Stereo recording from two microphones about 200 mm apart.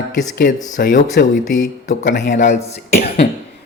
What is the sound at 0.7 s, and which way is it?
Speech, 40° left (ahead or behind).